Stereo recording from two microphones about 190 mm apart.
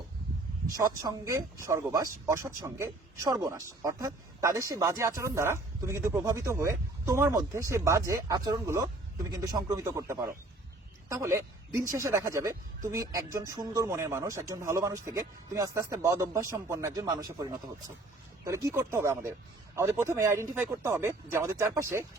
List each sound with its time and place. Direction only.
0.7 s speech: 20° right (ahead or behind)